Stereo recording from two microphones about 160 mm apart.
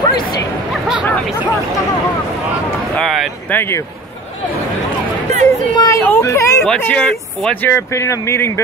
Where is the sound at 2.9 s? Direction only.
Centre (ahead or behind).